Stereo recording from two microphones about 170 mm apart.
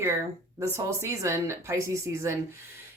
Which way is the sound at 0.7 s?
15° right (ahead or behind).